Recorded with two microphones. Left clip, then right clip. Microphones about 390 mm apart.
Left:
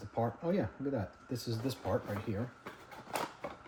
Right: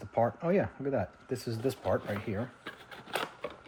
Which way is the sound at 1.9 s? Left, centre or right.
Centre.